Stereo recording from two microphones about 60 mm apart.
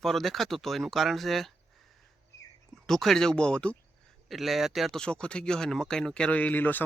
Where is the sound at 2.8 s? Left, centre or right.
Centre.